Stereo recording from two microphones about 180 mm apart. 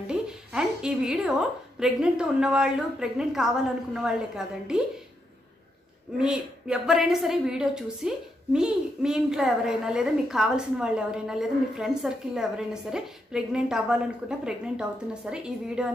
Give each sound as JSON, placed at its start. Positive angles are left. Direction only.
{"t": 0.0, "sound": "a sound", "side_deg": -5}
{"t": 1.8, "sound": "a child's voice", "side_deg": -5}
{"t": 6.1, "sound": "a child's voice", "side_deg": -5}